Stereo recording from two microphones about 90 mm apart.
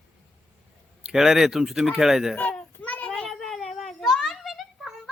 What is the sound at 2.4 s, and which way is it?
Children playing, 15° left (ahead or behind).